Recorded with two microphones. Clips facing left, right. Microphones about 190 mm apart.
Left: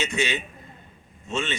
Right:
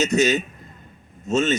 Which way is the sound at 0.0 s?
40° right (ahead or behind).